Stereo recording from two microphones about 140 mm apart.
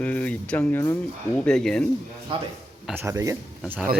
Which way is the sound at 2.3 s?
40° right (ahead or behind).